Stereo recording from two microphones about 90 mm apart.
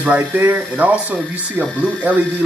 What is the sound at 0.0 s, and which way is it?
Speech, 20° right (ahead or behind).